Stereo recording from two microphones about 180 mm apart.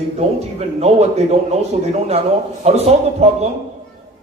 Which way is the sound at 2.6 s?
35° right (ahead or behind).